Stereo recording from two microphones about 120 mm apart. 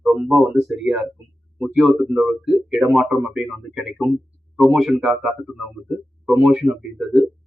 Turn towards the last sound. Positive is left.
turn(degrees=0)  # may be behind; listen again after turning